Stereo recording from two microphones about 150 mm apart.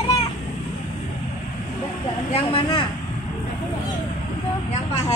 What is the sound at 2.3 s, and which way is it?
Speech, 35° left (ahead or behind).